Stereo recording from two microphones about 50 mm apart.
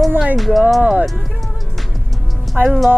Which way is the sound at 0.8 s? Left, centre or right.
Right.